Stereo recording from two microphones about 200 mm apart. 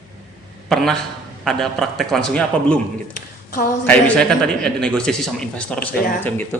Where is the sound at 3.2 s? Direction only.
40° left (ahead or behind).